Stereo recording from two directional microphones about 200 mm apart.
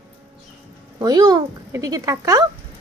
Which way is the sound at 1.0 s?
20° right (ahead or behind).